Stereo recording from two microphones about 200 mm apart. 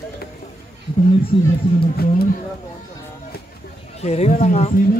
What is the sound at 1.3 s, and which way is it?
Speech, 25° left (ahead or behind).